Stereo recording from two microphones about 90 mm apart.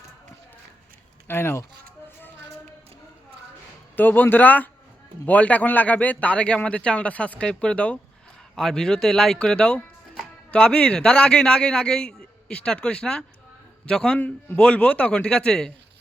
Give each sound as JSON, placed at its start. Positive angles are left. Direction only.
{"t": 1.3, "sound": "speech", "side_deg": 25}
{"t": 3.9, "sound": "a man's voice", "side_deg": 20}